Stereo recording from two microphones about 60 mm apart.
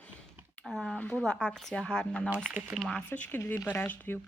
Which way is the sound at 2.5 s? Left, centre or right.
Centre.